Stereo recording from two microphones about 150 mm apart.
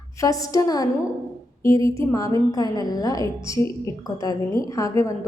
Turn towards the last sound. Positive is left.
turn(degrees=20)  # may be behind; listen again after turning